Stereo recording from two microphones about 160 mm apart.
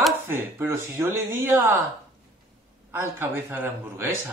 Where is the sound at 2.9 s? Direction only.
15° right (ahead or behind).